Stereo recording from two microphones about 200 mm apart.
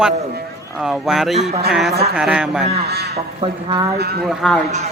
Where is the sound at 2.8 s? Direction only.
55° right (ahead or behind).